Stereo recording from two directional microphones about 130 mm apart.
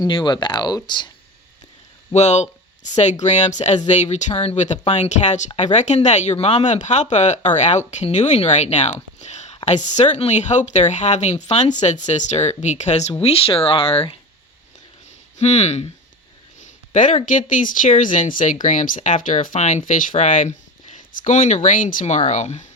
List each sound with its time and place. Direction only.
0.0 s speech: 35° left (ahead or behind)
2.1 s speech: 60° left (ahead or behind)
9.2 s a sound: 60° left (ahead or behind)
9.6 s speech: 60° left (ahead or behind)
13.2 s speech: 45° left (ahead or behind)
15.4 s speech: 55° left (ahead or behind)
16.9 s speech: 70° left (ahead or behind)
18.6 s speech: 70° left (ahead or behind)